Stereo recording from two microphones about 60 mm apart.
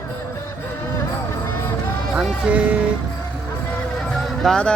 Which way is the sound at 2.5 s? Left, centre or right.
Right.